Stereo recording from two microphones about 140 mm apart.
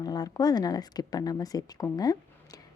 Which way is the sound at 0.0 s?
30° left (ahead or behind).